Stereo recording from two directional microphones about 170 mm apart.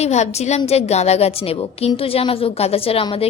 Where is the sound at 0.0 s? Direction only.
40° left (ahead or behind).